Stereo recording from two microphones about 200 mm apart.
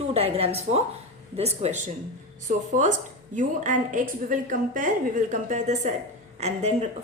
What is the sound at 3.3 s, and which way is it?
A woman's voice, 40° right (ahead or behind).